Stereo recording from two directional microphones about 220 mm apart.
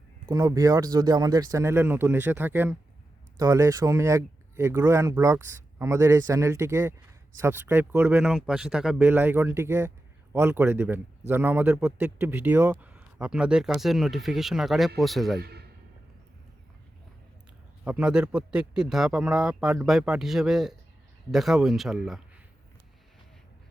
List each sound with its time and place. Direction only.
0.3 s speech: 15° right (ahead or behind); by 15.4 s centre (ahead or behind)
15.4 s a man's voice: 45° right (ahead or behind)
17.8 s speech: 5° right (ahead or behind)